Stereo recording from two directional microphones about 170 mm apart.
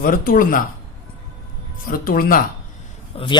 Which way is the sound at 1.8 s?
60° left (ahead or behind).